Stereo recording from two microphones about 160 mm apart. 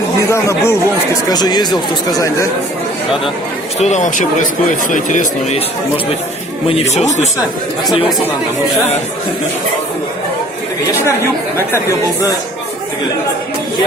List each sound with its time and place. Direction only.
0.2 s speech: 20° left (ahead or behind)
3.8 s speech: 45° left (ahead or behind)
6.7 s speech: 45° left (ahead or behind)